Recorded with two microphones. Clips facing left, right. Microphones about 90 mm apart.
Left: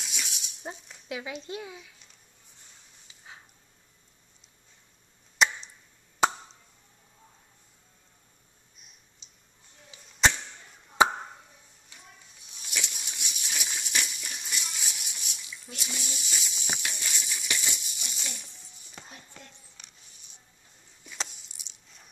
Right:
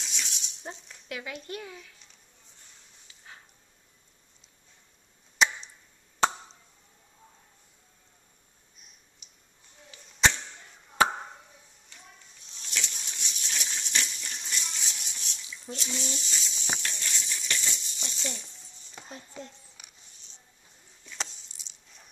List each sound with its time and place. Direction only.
0.0 s rattle: 5° left (ahead or behind)
1.0 s speech: 20° left (ahead or behind)
3.1 s dog: 10° left (ahead or behind)
5.4 s chop: centre (ahead or behind)
6.2 s chop: 10° left (ahead or behind)
10.0 s arrow: 5° left (ahead or behind)
11.0 s chop: 20° left (ahead or behind)
11.9 s a sound: 10° left (ahead or behind)
15.7 s coin: 5° left (ahead or behind)
19.4 s a sound: 10° right (ahead or behind)
19.8 s music: 10° right (ahead or behind)
21.0 s a sound: 10° left (ahead or behind)